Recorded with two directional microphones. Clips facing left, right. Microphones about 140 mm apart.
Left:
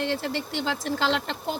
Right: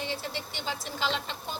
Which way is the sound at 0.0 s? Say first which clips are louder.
Left 7 dB; 80° left.